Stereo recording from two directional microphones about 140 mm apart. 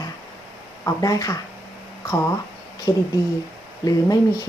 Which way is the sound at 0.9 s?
25° left (ahead or behind).